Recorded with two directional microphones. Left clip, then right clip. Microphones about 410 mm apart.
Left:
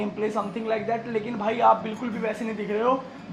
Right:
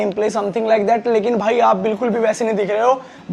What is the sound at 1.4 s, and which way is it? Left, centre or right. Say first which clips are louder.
Speech: right 6 dB; right.